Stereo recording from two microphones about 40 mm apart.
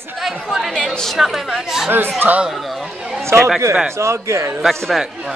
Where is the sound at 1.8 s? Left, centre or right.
Right.